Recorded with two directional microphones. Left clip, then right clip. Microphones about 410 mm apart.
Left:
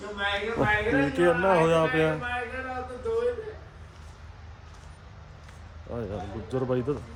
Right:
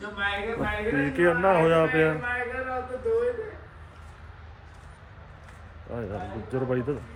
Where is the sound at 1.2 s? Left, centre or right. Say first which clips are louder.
Right 2 dB; centre.